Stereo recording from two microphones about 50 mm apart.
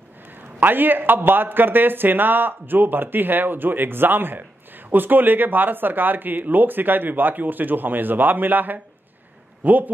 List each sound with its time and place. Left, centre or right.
0.6 s speech: right